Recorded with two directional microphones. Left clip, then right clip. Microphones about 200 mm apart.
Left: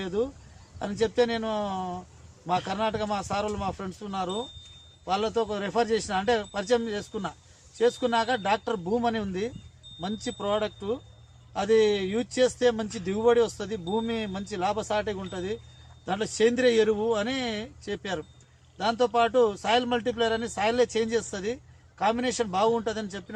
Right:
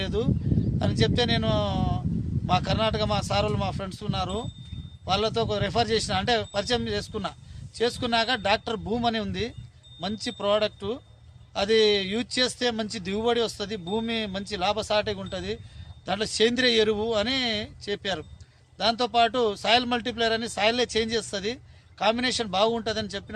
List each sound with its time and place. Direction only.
0.0 s a man's voice: 30° right (ahead or behind)
8.1 s a man's voice: 25° right (ahead or behind)
18.8 s a man's voice: 25° right (ahead or behind)